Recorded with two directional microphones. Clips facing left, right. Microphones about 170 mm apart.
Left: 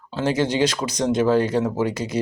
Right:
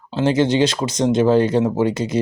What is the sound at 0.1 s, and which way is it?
Speech, 25° right (ahead or behind).